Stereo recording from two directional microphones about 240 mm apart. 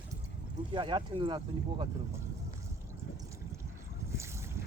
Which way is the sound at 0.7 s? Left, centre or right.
Centre.